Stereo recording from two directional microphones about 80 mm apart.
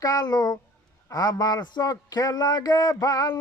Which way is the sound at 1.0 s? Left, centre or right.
Left.